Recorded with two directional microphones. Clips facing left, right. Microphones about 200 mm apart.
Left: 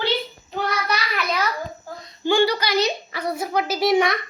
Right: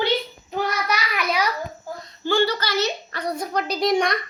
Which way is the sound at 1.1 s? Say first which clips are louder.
Right 2 dB; 10° right (ahead or behind).